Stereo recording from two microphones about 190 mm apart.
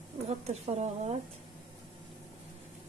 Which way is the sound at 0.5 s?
35° right (ahead or behind).